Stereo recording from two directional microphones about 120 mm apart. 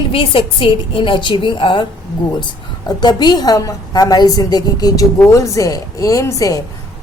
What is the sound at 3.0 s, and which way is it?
A woman's voice, 35° left (ahead or behind).